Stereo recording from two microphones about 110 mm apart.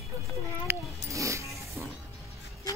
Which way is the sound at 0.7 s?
30° right (ahead or behind).